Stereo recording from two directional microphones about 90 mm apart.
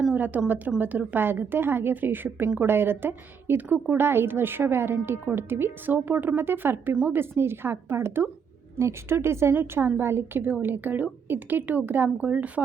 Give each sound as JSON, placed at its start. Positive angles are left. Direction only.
{"t": 0.1, "sound": "a woman's voice", "side_deg": -20}